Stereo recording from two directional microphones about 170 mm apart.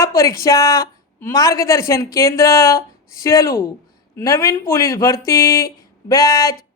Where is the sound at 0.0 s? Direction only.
20° left (ahead or behind).